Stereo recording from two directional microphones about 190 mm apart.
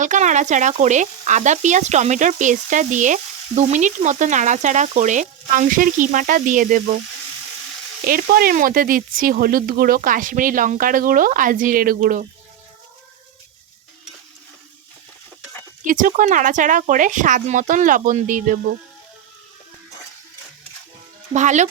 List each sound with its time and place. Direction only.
0.0 s frying: 40° right (ahead or behind)
8.0 s speech: 50° right (ahead or behind)
15.8 s speech: 45° right (ahead or behind)
21.3 s frying: 40° right (ahead or behind)